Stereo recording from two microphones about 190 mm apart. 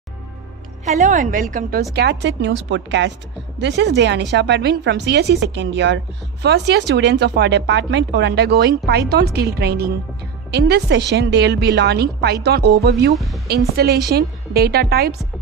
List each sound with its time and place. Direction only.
0.8 s a woman's voice: 40° right (ahead or behind)
2.0 s a woman's voice: 65° right (ahead or behind)
13.1 s speech: centre (ahead or behind)
13.8 s speech: 55° right (ahead or behind)